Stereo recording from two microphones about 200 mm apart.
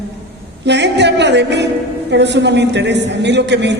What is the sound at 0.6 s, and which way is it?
A man's voice, 60° right (ahead or behind).